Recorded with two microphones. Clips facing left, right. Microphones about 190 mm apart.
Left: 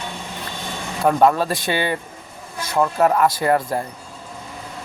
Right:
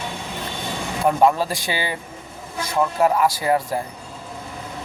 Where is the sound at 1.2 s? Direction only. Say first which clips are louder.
Left 1 dB; 10° right (ahead or behind).